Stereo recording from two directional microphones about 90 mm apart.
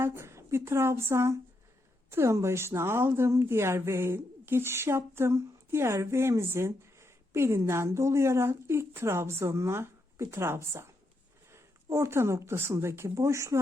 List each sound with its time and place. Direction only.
0.0 s a woman's voice: 30° right (ahead or behind)